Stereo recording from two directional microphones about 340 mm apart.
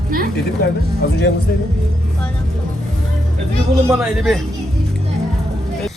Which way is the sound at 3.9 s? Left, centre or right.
Centre.